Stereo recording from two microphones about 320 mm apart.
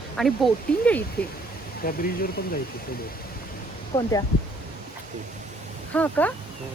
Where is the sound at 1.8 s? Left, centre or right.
Left.